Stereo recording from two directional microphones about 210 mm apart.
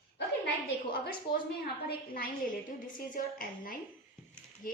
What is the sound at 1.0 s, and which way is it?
A woman's voice, 45° left (ahead or behind).